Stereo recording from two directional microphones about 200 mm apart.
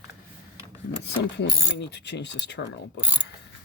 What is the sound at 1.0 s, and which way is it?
Filing, 60° left (ahead or behind).